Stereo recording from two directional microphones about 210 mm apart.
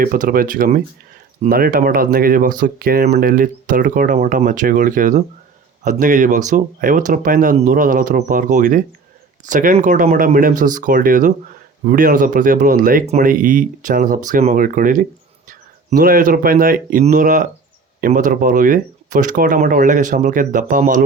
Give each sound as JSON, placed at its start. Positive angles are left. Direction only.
{"t": 0.0, "sound": "speech", "side_deg": -40}